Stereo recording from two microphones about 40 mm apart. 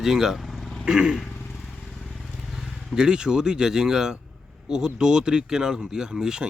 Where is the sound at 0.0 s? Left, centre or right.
Centre.